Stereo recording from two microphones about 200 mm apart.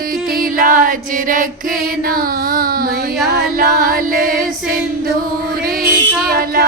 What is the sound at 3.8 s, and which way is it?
Music, 45° right (ahead or behind).